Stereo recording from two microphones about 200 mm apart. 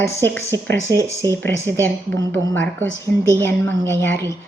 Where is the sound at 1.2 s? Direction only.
10° left (ahead or behind).